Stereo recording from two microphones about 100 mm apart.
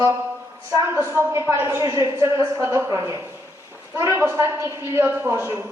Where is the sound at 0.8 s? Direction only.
25° right (ahead or behind).